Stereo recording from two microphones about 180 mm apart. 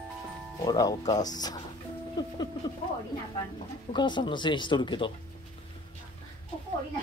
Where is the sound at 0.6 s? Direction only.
20° left (ahead or behind).